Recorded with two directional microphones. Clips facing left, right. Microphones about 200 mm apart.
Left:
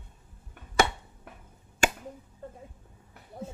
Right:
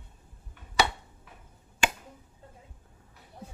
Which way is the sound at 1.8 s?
45° left (ahead or behind).